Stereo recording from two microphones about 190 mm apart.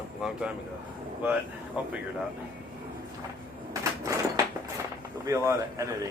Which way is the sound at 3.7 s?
15° right (ahead or behind).